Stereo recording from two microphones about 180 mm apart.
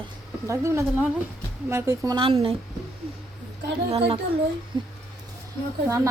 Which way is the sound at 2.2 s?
30° right (ahead or behind).